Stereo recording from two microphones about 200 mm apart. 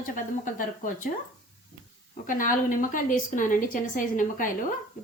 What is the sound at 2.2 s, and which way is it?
A woman's voice, 40° left (ahead or behind).